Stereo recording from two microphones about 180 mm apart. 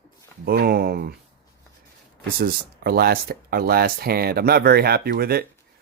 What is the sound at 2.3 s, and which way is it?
Speech, 60° right (ahead or behind).